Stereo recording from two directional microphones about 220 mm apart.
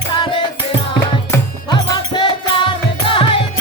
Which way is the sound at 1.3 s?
20° left (ahead or behind).